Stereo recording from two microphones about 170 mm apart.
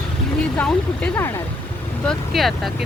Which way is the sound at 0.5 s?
5° left (ahead or behind).